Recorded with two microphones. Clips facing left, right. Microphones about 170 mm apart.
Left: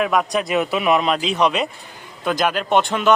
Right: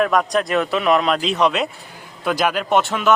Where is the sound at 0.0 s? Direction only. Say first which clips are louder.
Right 2 dB; 5° left (ahead or behind).